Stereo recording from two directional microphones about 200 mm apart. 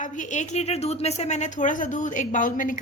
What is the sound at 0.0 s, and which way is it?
A woman's voice, 40° left (ahead or behind).